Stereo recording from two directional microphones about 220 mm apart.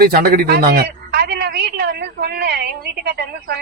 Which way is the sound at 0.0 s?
40° right (ahead or behind).